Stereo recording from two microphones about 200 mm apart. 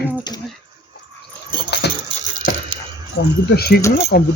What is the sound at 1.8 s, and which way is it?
Keys jangling, 55° left (ahead or behind).